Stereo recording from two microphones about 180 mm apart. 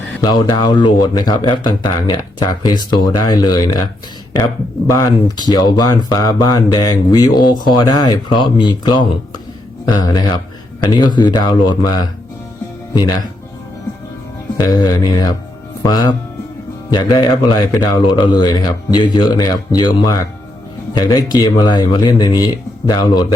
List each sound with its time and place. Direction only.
0.2 s speech: 20° left (ahead or behind)
4.9 s speech: 20° left (ahead or behind)
14.6 s speech: 20° left (ahead or behind)